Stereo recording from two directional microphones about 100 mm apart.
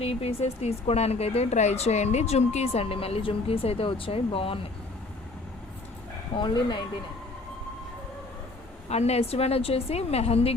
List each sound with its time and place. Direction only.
0.0 s speech: 85° left; by 4.6 s 70° left (ahead or behind)
6.3 s speech: 50° left (ahead or behind)
8.9 s a woman's voice: 90° left